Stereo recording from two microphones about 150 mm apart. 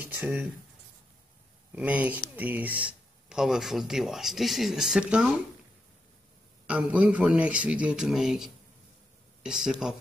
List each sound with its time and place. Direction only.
0.0 s a man's voice: 10° right (ahead or behind)
1.8 s speech: 10° right (ahead or behind)
6.7 s a man's voice: 10° right (ahead or behind)